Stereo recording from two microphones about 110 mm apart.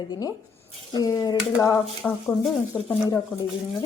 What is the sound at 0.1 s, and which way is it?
Dishes, 35° left (ahead or behind).